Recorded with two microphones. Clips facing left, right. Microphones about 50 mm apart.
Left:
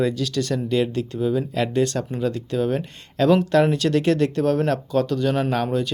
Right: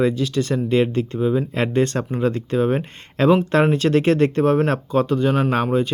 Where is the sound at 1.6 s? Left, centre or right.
Right.